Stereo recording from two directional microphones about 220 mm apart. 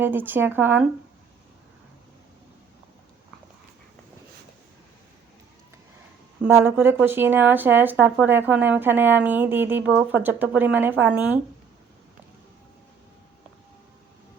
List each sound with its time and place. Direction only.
0.0 s speech: 10° right (ahead or behind)
6.4 s speech: 10° right (ahead or behind)